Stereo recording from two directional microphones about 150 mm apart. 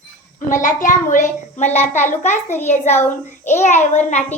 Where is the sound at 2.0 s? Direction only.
50° left (ahead or behind).